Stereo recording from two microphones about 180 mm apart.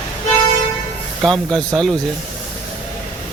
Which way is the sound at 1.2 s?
Centre (ahead or behind).